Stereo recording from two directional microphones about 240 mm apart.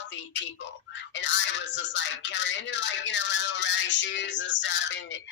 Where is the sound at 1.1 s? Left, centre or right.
Left.